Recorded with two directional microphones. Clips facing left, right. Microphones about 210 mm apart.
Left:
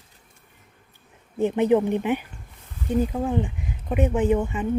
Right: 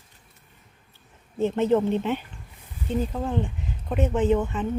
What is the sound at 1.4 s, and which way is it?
Speech, 15° left (ahead or behind).